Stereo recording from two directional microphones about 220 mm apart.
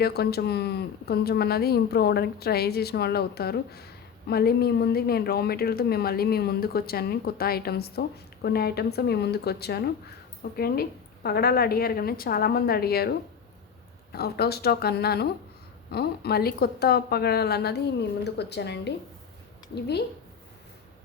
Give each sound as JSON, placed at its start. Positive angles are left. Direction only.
{"t": 0.0, "sound": "speech", "side_deg": 45}